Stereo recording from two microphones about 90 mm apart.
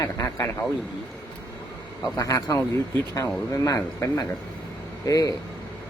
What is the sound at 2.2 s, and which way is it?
Speech, 35° left (ahead or behind).